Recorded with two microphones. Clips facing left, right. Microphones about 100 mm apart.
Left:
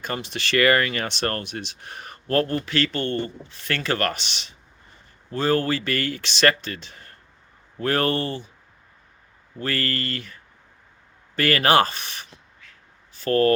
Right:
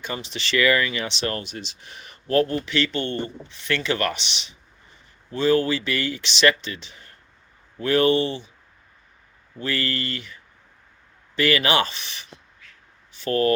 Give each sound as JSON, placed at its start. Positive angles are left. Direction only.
{"t": 0.0, "sound": "speech", "side_deg": 50}
{"t": 3.1, "sound": "speech", "side_deg": -20}
{"t": 3.6, "sound": "speech", "side_deg": 45}
{"t": 11.3, "sound": "speech", "side_deg": 45}